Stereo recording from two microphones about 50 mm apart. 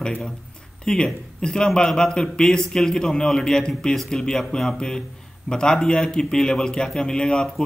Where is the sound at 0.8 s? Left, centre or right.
Centre.